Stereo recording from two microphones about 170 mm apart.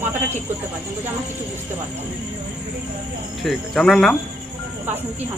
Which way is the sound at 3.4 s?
Centre (ahead or behind).